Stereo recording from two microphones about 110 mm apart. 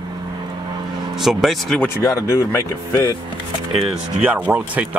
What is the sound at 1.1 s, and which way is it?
Speech, centre (ahead or behind).